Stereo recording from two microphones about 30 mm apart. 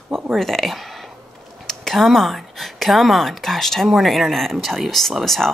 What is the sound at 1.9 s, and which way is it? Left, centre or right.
A woman's voice, centre.